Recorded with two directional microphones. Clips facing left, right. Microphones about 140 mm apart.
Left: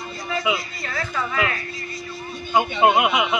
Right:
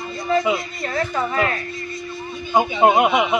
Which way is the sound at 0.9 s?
35° right (ahead or behind).